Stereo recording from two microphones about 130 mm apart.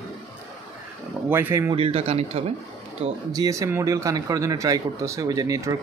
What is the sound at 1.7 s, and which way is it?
Speech, 50° right (ahead or behind).